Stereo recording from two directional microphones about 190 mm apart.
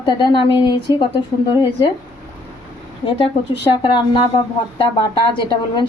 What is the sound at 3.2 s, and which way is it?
A woman's voice, 25° left (ahead or behind).